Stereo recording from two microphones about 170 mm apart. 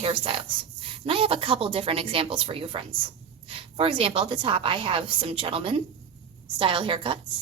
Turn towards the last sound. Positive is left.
turn(degrees=-30)  # may be behind; listen again after turning